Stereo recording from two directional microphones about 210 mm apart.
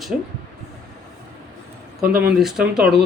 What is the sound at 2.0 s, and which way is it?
Speech, 45° right (ahead or behind).